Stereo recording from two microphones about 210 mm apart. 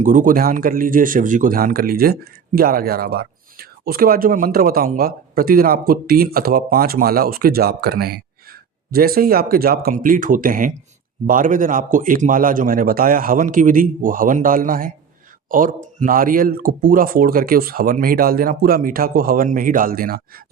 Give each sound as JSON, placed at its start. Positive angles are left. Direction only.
{"t": 0.0, "sound": "a man's voice", "side_deg": -40}